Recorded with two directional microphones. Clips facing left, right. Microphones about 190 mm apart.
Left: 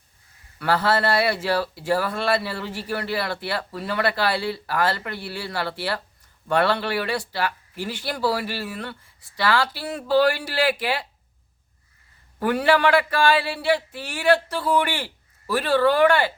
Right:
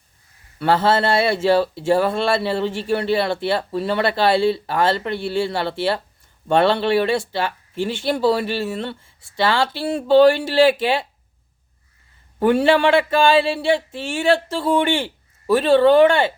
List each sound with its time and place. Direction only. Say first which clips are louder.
0.6 s speech: right 4 dB; 25° right (ahead or behind)
12.4 s speech: right 4 dB; 25° right (ahead or behind)